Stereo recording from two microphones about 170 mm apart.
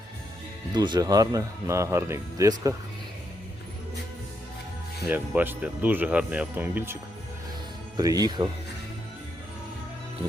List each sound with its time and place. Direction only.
0.7 s speech: 25° right (ahead or behind)
5.0 s speech: 10° right (ahead or behind)